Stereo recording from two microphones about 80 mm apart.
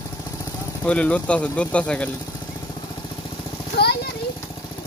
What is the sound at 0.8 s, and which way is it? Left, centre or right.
Speech, centre.